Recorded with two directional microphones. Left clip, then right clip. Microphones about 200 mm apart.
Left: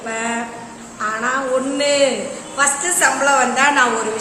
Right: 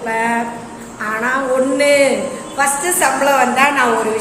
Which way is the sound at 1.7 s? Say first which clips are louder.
Right 4 dB; 20° left (ahead or behind).